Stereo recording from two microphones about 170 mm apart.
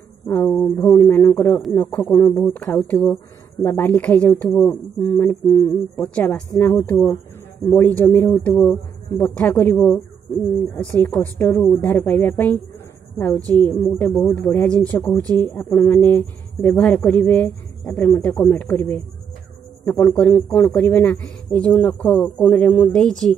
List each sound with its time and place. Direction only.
0.6 s a sound: 20° left (ahead or behind)
1.7 s speech: 15° left (ahead or behind)
5.0 s a sound: 15° left (ahead or behind)
6.0 s speech: 5° left (ahead or behind)
11.0 s a sound: 20° left (ahead or behind)
11.7 s speech: 10° left (ahead or behind)
13.4 s a woman's voice: 20° right (ahead or behind)
13.7 s speech: 15° left (ahead or behind)
20.0 s speech: 15° left (ahead or behind)